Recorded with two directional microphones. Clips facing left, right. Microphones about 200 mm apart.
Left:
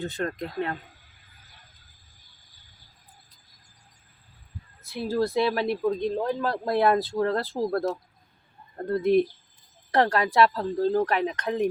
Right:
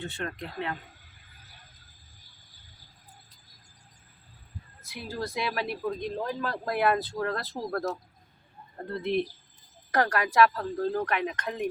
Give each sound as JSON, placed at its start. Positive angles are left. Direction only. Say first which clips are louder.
{"t": 0.0, "sound": "speech", "louder": "left 6 dB", "side_deg": 40}
{"t": 5.0, "sound": "speech", "louder": "left 9 dB", "side_deg": 35}
{"t": 8.9, "sound": "speech", "louder": "left 7 dB", "side_deg": 45}
{"t": 9.9, "sound": "speech", "louder": "left 3 dB", "side_deg": 25}